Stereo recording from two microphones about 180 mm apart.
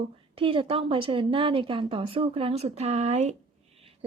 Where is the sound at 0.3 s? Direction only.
30° right (ahead or behind).